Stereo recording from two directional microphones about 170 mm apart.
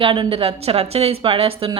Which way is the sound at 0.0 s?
30° right (ahead or behind).